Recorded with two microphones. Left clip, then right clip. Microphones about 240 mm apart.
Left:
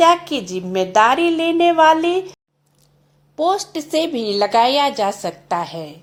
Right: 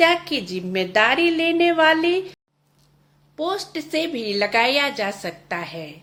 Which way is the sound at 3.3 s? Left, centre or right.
Centre.